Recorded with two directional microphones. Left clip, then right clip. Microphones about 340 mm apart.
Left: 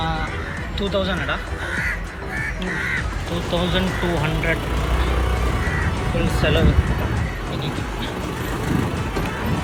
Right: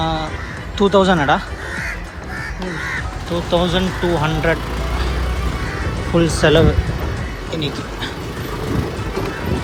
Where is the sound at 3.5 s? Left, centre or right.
Centre.